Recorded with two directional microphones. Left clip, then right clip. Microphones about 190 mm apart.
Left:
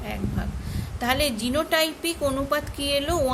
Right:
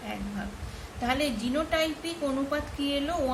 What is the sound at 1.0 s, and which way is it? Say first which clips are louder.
A woman's voice: left 5 dB; 55° left (ahead or behind).